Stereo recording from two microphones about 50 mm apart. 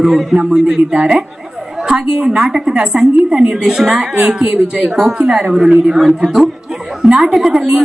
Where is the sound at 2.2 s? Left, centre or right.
Centre.